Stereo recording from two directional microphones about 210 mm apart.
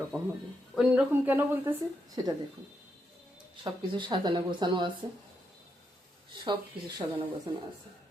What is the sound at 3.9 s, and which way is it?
Speech, 25° right (ahead or behind).